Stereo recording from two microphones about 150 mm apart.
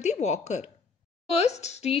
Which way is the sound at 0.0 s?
50° left (ahead or behind).